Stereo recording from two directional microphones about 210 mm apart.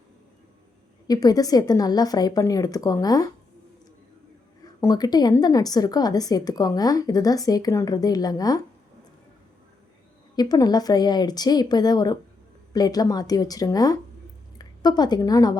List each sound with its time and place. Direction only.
1.0 s speech: 20° left (ahead or behind)
4.8 s speech: 20° left (ahead or behind)
10.3 s a woman's voice: 20° left (ahead or behind)